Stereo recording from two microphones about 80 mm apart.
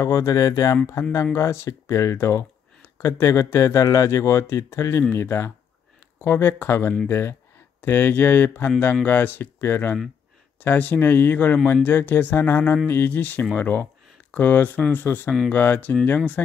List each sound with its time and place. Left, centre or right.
0.0 s speech: left; by 16.2 s centre